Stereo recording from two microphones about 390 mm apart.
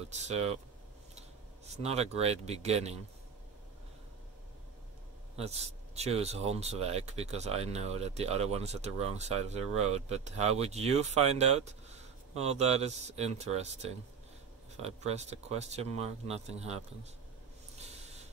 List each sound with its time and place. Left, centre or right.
0.1 s speech: centre
1.8 s speech: centre
5.3 s speech: centre